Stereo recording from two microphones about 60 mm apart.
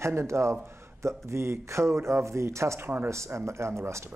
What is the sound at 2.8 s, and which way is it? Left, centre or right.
Speech, right.